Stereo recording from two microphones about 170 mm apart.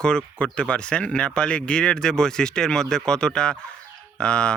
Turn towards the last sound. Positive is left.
turn(degrees=5)  # may be behind; listen again after turning